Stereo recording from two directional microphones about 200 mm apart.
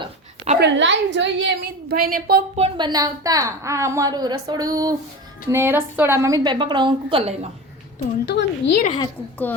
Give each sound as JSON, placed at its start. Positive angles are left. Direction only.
{"t": 0.0, "sound": "a sound", "side_deg": -35}
{"t": 0.6, "sound": "a woman's voice", "side_deg": -65}
{"t": 2.6, "sound": "a woman's voice", "side_deg": -25}
{"t": 8.3, "sound": "speech", "side_deg": 60}